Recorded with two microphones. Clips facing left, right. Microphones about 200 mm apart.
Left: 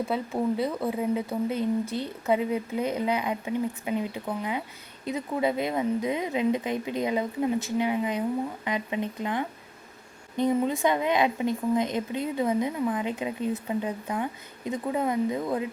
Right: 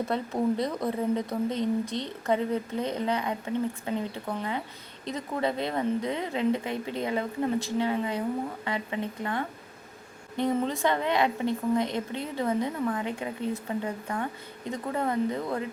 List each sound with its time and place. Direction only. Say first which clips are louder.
0.0 s speech: even; 5° left (ahead or behind)